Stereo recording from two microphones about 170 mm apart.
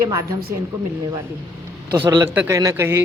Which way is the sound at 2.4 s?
20° right (ahead or behind).